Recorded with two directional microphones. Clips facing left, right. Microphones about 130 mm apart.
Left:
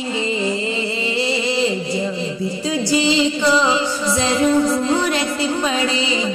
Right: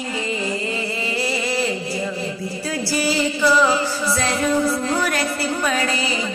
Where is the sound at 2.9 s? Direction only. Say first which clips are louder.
Left 4 dB; 20° left (ahead or behind).